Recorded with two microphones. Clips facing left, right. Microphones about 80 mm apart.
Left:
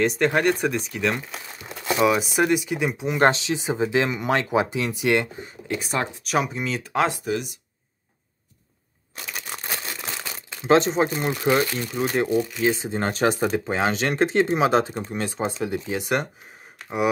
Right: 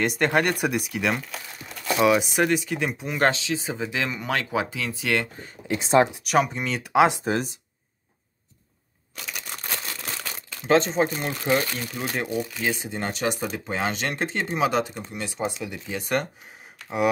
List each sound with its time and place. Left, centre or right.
0.0 s speech: centre
1.6 s crumpling: left
2.0 s speech: centre
3.2 s speech: left
5.8 s speech: right
6.2 s speech: centre
6.9 s speech: centre
7.2 s speech: right
9.8 s crumpling: left
11.9 s speech: left